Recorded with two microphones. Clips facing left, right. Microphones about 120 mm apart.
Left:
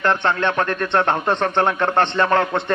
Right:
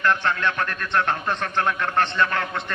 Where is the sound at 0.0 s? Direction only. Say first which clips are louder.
Left 3 dB; 30° left (ahead or behind).